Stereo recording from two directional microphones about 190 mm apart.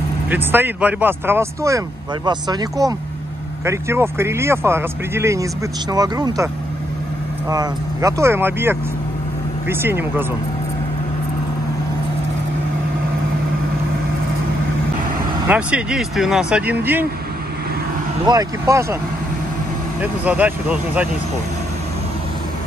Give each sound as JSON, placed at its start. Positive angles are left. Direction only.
{"t": 0.3, "sound": "speech", "side_deg": -10}
{"t": 15.4, "sound": "speech", "side_deg": -5}
{"t": 18.2, "sound": "speech", "side_deg": -20}
{"t": 20.0, "sound": "speech", "side_deg": -10}